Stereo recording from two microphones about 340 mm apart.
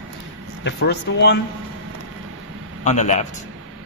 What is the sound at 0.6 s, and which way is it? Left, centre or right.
Speech, left.